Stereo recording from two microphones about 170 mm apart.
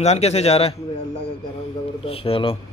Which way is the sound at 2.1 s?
35° left (ahead or behind).